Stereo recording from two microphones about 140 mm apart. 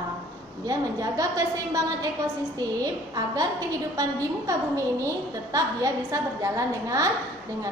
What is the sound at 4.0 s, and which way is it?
Speech, 25° right (ahead or behind).